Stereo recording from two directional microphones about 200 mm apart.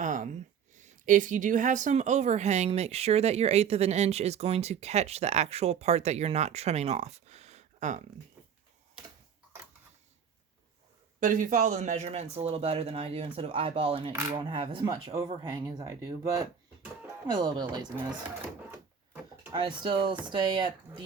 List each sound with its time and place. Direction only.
0.0 s a woman's voice: 40° right (ahead or behind)
11.2 s a woman's voice: 40° right (ahead or behind); by 16.1 s 20° right (ahead or behind)
17.3 s speech: 20° right (ahead or behind)